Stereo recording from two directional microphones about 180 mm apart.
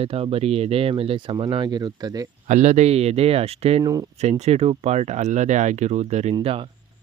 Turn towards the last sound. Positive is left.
turn(degrees=-30)  # may be behind; listen again after turning